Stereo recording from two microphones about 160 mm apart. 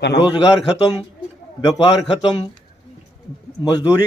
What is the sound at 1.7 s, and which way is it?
Speech, 25° left (ahead or behind).